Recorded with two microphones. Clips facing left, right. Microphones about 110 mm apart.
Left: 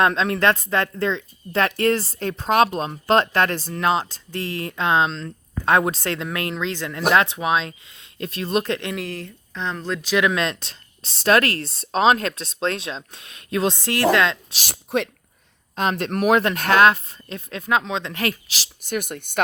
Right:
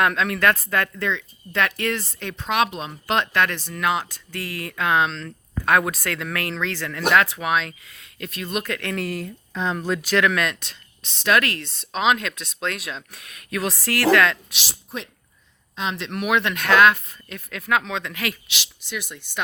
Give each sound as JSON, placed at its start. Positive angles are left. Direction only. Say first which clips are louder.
{"t": 0.0, "sound": "speech", "louder": "left 2 dB", "side_deg": 30}
{"t": 9.0, "sound": "speech", "louder": "right 2 dB", "side_deg": -5}
{"t": 10.2, "sound": "speech", "louder": "left 2 dB", "side_deg": 20}
{"t": 14.7, "sound": "speech", "louder": "left 11 dB", "side_deg": 70}
{"t": 15.7, "sound": "speech", "louder": "left 5 dB", "side_deg": 50}
{"t": 18.1, "sound": "speech", "louder": "left 4 dB", "side_deg": 35}
{"t": 18.9, "sound": "speech", "louder": "left 6 dB", "side_deg": 55}